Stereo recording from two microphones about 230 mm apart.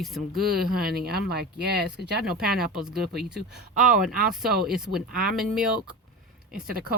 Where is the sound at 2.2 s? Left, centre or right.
Centre.